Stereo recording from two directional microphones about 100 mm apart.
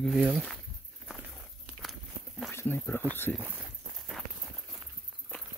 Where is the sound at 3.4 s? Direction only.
15° right (ahead or behind).